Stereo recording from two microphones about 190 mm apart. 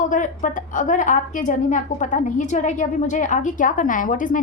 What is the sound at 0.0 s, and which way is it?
A woman's voice, 40° left (ahead or behind).